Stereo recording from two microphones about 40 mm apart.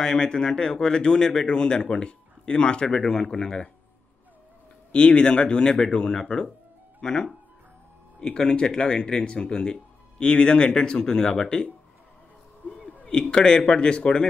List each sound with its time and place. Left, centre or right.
0.0 s speech: centre
3.1 s speech: centre
4.9 s speech: left
13.0 s speech: left